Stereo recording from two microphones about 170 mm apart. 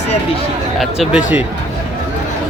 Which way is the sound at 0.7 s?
5° right (ahead or behind).